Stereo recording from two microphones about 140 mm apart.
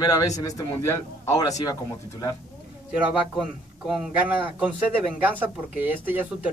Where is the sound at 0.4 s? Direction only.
25° left (ahead or behind).